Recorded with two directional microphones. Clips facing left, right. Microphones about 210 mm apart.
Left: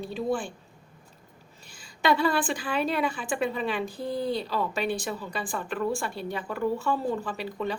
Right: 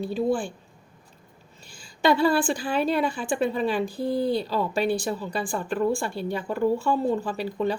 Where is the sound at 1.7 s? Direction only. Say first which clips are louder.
Right 3 dB; 30° right (ahead or behind).